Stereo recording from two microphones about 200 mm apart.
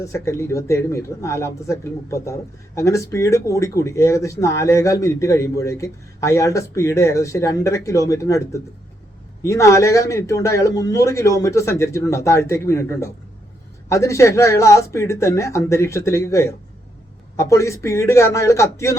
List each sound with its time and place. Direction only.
0.0 s speech: 15° left (ahead or behind)